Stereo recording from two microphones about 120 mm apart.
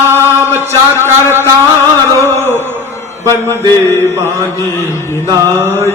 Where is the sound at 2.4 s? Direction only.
20° right (ahead or behind).